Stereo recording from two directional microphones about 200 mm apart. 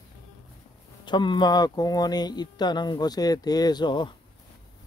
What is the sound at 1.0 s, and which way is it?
Speech, 20° left (ahead or behind).